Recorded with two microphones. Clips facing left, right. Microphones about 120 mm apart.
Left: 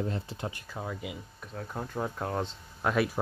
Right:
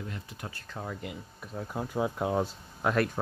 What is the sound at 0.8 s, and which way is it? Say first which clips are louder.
Speech: right 2 dB; 5° left (ahead or behind).